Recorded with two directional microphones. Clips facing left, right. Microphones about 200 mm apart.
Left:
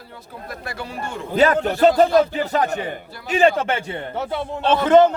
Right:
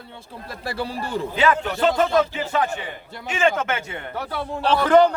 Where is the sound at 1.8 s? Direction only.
35° left (ahead or behind).